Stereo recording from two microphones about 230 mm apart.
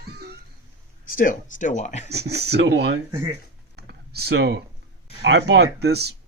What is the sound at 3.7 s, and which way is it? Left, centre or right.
Computer keyboard, right.